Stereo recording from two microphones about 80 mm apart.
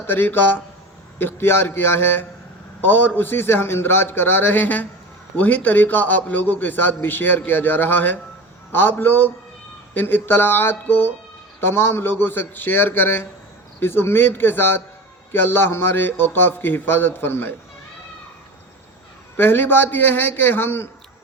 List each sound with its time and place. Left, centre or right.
0.1 s a man's voice: left
19.4 s a man's voice: left